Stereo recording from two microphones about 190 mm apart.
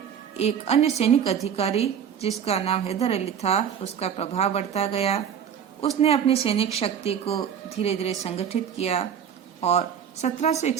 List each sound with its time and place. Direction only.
0.3 s a woman's voice: 35° left (ahead or behind)